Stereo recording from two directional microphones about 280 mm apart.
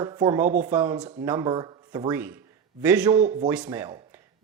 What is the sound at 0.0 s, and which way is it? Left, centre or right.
A man's voice, centre.